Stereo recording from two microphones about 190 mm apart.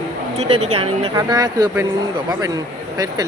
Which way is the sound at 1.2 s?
20° right (ahead or behind).